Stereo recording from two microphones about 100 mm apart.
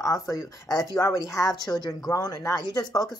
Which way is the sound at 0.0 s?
35° left (ahead or behind).